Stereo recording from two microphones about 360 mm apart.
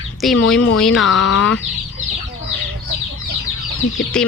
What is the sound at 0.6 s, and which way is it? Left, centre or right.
Bird, left.